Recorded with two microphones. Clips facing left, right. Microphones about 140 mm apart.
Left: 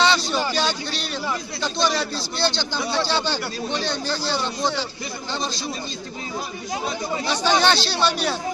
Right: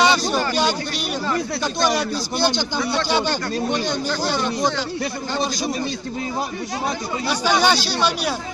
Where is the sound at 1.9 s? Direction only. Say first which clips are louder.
Right 4 dB; 15° right (ahead or behind).